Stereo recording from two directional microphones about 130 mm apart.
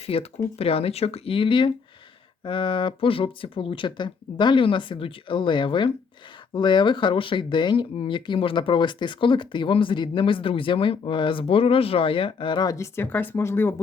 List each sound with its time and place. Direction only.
0.0 s speech: 50° left (ahead or behind); by 13.8 s 20° left (ahead or behind)